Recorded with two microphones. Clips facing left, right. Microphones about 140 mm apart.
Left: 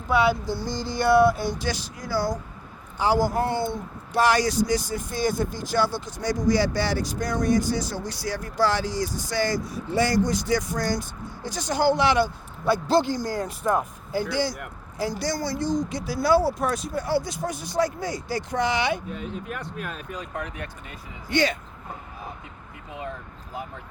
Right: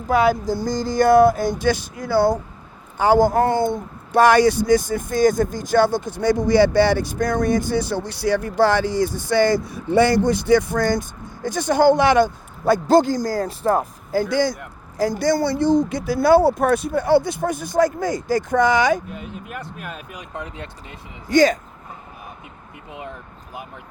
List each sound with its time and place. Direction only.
0.1 s speech: 45° right (ahead or behind); by 2.4 s 65° right (ahead or behind)
3.0 s speech: 50° right (ahead or behind)
19.1 s speech: 5° right (ahead or behind)
20.3 s speech: 20° right (ahead or behind)
21.2 s speech: 40° right (ahead or behind)
22.9 s speech: 20° right (ahead or behind)